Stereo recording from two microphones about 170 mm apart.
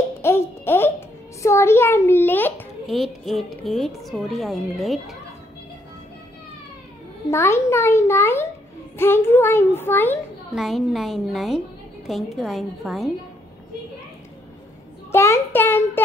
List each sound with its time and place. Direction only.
0.2 s a child's voice: 15° left (ahead or behind)
2.9 s a woman's voice: centre (ahead or behind)
7.2 s a child's voice: 15° left (ahead or behind)
10.5 s a woman's voice: centre (ahead or behind)
15.0 s a child's voice: 15° left (ahead or behind)